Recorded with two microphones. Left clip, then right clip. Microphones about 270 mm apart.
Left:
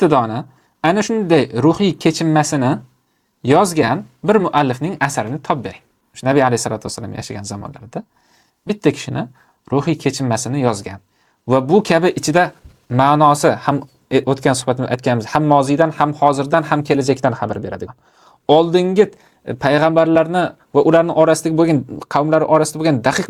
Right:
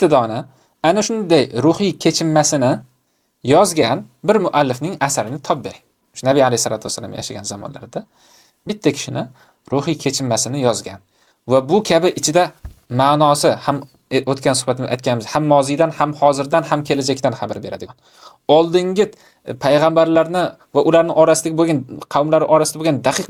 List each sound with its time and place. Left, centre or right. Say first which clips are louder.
0.0 s a man's voice: even; left